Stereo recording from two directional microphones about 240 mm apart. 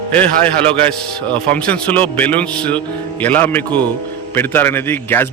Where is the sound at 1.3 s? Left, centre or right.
Centre.